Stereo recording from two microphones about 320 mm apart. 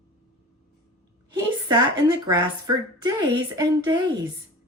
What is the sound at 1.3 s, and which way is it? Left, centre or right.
Speech, centre.